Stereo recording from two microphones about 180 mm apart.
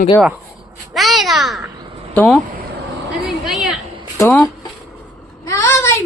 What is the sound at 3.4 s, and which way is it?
Speech, 5° right (ahead or behind).